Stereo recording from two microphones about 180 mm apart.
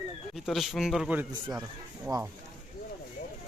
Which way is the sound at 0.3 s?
Centre (ahead or behind).